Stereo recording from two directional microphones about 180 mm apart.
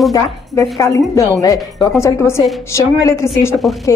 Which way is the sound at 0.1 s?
15° left (ahead or behind).